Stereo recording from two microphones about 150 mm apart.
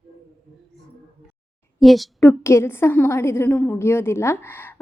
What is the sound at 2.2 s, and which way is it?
A woman's voice, 15° left (ahead or behind).